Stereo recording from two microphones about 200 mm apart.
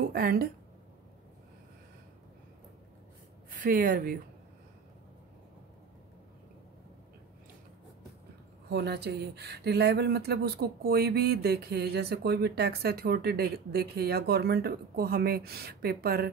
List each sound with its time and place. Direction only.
0.1 s speech: 50° right (ahead or behind)
3.4 s speech: 45° right (ahead or behind)
8.6 s speech: 55° right (ahead or behind)